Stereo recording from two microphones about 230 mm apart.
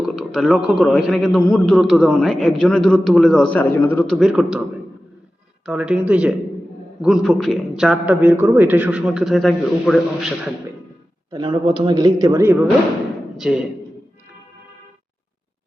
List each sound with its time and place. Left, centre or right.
0.2 s a man's voice: centre
5.6 s a man's voice: centre
11.3 s a man's voice: centre
13.3 s a man's voice: centre